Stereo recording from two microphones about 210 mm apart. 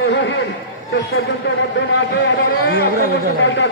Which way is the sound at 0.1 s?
60° left (ahead or behind).